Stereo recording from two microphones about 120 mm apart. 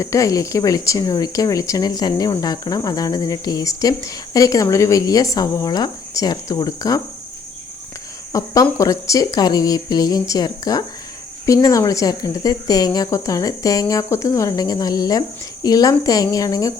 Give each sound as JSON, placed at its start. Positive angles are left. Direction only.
{"t": 0.0, "sound": "a woman's voice", "side_deg": 25}
{"t": 8.3, "sound": "a woman's voice", "side_deg": 25}